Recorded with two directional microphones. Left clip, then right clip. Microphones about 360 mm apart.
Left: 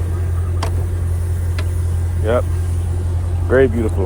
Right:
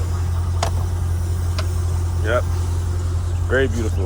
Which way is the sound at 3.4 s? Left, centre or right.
Centre.